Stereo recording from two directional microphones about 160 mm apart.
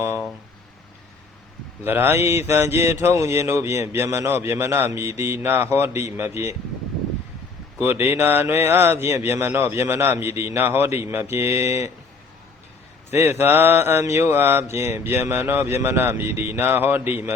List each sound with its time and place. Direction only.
0.0 s a sound: 15° right (ahead or behind)
1.8 s mantra: 15° right (ahead or behind)
7.8 s mantra: 15° right (ahead or behind)
13.1 s mantra: 15° right (ahead or behind)